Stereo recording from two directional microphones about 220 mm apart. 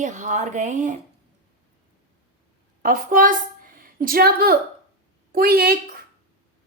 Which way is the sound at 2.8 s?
40° right (ahead or behind).